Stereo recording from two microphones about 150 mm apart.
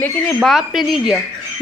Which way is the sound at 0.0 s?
5° left (ahead or behind).